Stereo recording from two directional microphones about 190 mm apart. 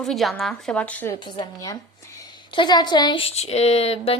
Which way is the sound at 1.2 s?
20° left (ahead or behind).